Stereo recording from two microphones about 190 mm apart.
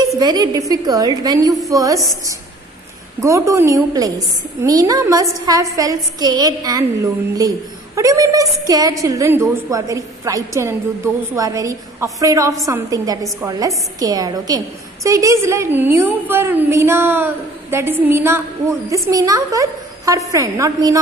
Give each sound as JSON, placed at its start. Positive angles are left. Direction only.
{"t": 0.2, "sound": "a woman's voice", "side_deg": -20}
{"t": 3.2, "sound": "a woman's voice", "side_deg": -15}